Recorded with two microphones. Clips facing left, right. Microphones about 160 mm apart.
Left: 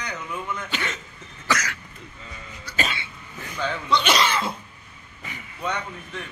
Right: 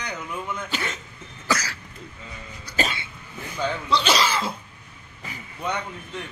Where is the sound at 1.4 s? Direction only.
30° right (ahead or behind).